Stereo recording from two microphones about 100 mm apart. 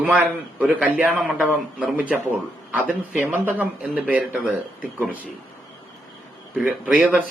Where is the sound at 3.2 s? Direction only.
20° right (ahead or behind).